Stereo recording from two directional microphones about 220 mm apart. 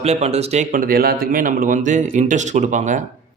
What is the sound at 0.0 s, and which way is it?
Speech, 30° right (ahead or behind).